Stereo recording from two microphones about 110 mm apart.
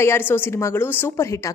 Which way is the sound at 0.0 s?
20° left (ahead or behind).